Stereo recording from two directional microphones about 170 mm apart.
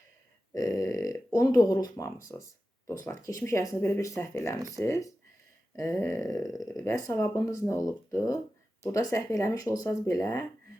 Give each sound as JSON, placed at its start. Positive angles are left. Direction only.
{"t": 0.5, "sound": "speech", "side_deg": 20}
{"t": 6.4, "sound": "speech", "side_deg": 0}
{"t": 6.8, "sound": "speech", "side_deg": 20}